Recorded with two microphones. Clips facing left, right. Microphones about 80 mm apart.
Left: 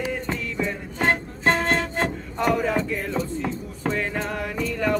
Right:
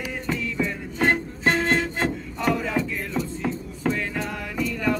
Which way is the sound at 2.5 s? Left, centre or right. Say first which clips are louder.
Left 2 dB; left.